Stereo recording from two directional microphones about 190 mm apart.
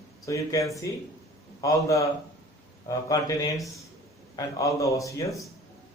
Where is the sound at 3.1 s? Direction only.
15° left (ahead or behind).